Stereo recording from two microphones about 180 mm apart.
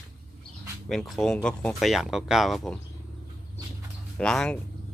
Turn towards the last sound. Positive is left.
turn(degrees=5)  # may be behind; listen again after turning